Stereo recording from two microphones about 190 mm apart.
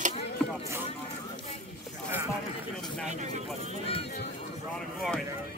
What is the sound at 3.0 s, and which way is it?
Vehicle, 35° right (ahead or behind).